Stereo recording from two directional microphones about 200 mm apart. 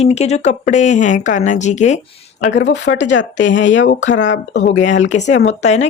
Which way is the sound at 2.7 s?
60° left (ahead or behind).